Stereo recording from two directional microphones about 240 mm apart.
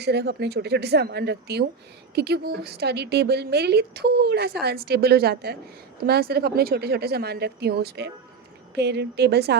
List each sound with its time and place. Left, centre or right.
0.0 s a woman's voice: right